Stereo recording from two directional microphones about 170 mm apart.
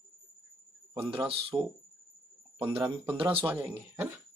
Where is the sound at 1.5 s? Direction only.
15° right (ahead or behind).